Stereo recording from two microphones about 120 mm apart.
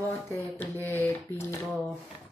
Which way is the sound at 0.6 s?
20° left (ahead or behind).